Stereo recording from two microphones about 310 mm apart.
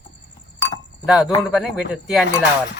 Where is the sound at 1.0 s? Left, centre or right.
Centre.